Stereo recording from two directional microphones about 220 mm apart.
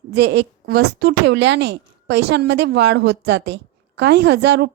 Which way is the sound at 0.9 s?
50° right (ahead or behind).